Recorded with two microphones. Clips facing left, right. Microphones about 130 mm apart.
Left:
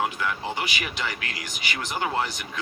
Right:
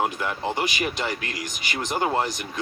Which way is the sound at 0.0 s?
45° right (ahead or behind).